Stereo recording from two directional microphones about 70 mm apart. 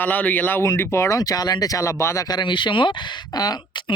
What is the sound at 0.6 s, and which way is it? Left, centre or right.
Speech, left.